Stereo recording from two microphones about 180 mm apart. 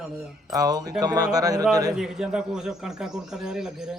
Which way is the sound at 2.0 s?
Centre (ahead or behind).